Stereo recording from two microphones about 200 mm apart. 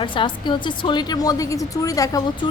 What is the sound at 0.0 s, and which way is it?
Speech, 25° left (ahead or behind).